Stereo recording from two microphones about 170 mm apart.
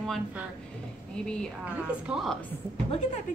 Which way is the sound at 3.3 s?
50° left (ahead or behind).